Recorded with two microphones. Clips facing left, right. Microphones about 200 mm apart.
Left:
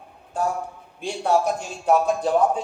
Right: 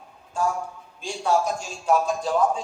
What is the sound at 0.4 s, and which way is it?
A man's voice, 60° left (ahead or behind).